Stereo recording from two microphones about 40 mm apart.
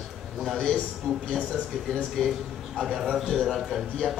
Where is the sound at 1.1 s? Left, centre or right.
Centre.